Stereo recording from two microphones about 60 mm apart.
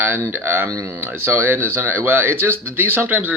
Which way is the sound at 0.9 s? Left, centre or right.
Right.